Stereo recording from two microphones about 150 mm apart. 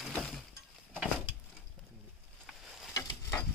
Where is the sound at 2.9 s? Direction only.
20° left (ahead or behind).